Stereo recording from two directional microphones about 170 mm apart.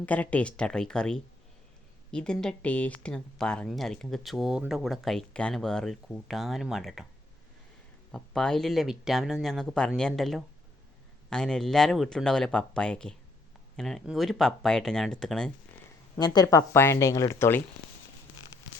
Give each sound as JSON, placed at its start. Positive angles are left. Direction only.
{"t": 0.0, "sound": "speech", "side_deg": 10}
{"t": 8.1, "sound": "speech", "side_deg": 5}
{"t": 16.1, "sound": "speech", "side_deg": 25}